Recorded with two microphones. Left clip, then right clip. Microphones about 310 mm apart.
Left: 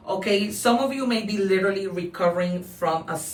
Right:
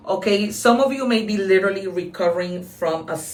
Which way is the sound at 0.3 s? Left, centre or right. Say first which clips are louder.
Right 4 dB; centre.